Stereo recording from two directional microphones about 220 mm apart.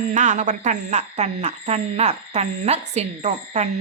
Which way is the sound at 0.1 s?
35° right (ahead or behind).